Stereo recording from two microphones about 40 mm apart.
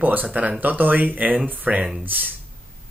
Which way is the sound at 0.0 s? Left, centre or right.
Right.